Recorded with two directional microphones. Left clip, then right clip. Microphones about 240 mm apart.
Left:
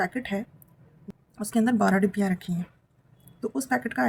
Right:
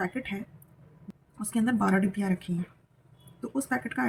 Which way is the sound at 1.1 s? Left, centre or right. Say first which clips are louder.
Left 4 dB; centre.